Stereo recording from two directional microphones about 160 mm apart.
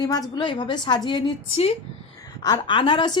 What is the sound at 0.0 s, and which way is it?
A woman's voice, 25° left (ahead or behind).